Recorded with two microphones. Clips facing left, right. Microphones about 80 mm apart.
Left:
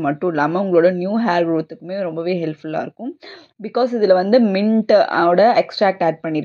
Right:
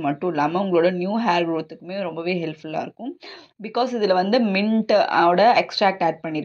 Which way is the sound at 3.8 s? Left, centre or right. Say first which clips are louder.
Left 5 dB; left.